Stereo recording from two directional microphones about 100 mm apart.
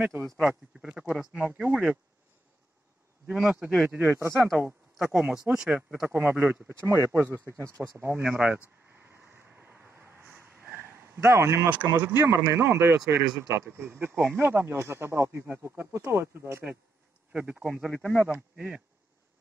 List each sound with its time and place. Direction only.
0.2 s speech: 5° right (ahead or behind)
3.3 s speech: 5° right (ahead or behind)
6.0 s speech: 20° right (ahead or behind)
8.2 s speech: 15° right (ahead or behind)
9.3 s vehicle: 20° right (ahead or behind)
11.7 s speech: 15° right (ahead or behind)
17.3 s speech: 10° right (ahead or behind)